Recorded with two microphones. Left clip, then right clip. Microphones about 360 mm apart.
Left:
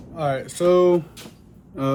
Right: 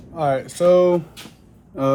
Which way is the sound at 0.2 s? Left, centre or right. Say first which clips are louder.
Right 4 dB; centre.